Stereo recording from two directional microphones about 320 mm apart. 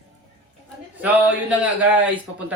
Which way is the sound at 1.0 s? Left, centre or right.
Centre.